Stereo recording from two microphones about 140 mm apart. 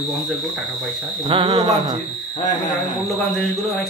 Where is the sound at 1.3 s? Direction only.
40° right (ahead or behind).